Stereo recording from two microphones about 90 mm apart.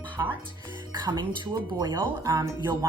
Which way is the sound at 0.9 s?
50° right (ahead or behind).